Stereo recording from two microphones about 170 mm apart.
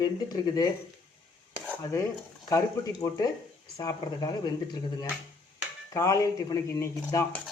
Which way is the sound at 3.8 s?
20° left (ahead or behind).